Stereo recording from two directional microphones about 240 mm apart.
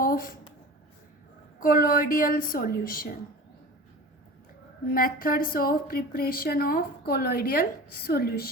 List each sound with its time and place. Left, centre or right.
0.0 s a sound: left
1.5 s speech: left
4.9 s speech: left